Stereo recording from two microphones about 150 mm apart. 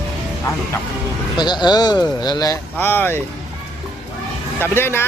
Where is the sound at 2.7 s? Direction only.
15° left (ahead or behind).